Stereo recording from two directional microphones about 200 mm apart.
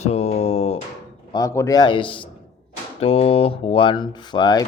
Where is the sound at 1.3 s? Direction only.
15° left (ahead or behind).